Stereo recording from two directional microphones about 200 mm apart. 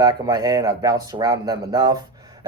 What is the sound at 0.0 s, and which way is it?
Speech, 20° right (ahead or behind).